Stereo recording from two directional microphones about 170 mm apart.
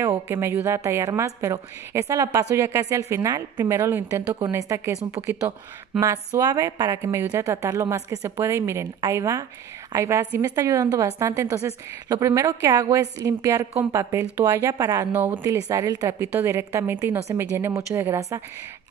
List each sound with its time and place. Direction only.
0.3 s a woman's voice: 15° right (ahead or behind)
5.9 s a woman's voice: 20° right (ahead or behind)